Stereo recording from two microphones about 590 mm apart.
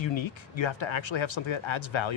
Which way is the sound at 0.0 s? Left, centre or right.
Left.